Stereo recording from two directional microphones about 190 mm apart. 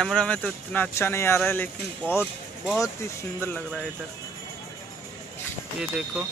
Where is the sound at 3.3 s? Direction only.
10° left (ahead or behind).